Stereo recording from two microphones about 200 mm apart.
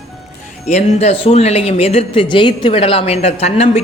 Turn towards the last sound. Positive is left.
turn(degrees=30)  # may be behind; listen again after turning